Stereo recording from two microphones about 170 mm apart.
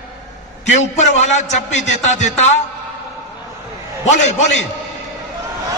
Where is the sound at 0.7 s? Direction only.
40° left (ahead or behind).